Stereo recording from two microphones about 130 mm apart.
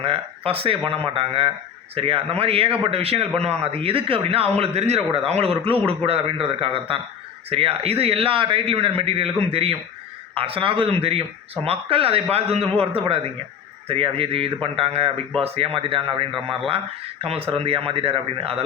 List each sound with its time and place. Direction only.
0.0 s speech: 45° right (ahead or behind)